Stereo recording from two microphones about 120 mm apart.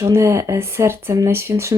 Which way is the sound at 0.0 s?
25° right (ahead or behind).